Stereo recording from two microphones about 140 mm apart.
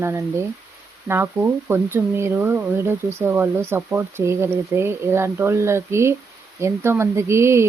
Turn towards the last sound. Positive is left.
turn(degrees=-20)  # may be behind; listen again after turning